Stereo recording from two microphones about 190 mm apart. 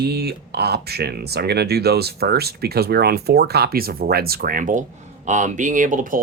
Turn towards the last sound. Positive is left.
turn(degrees=-45)  # may be behind; listen again after turning